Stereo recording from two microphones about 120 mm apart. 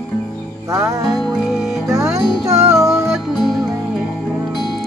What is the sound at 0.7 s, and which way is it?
Music, 25° right (ahead or behind).